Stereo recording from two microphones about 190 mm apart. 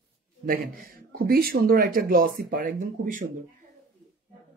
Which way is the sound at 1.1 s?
50° right (ahead or behind).